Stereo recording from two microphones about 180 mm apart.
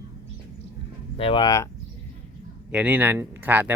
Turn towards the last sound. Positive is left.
turn(degrees=-10)  # may be behind; listen again after turning